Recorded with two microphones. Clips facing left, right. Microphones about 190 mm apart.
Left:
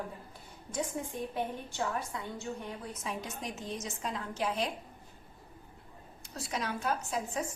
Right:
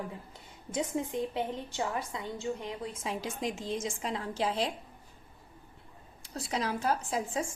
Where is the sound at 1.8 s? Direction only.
20° right (ahead or behind).